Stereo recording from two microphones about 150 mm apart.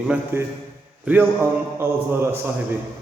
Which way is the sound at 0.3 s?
15° right (ahead or behind).